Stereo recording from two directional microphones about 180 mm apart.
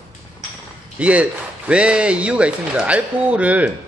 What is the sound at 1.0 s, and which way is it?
A man's voice, 5° right (ahead or behind).